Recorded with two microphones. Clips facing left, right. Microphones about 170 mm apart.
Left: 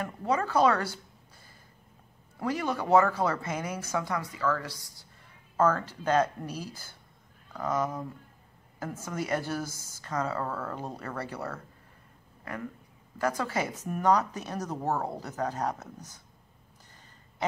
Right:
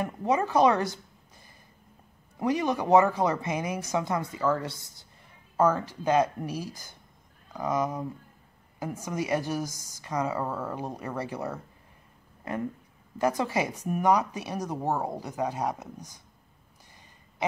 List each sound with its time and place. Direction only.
0.0 s speech: 20° right (ahead or behind)
2.3 s speech: 20° right (ahead or behind)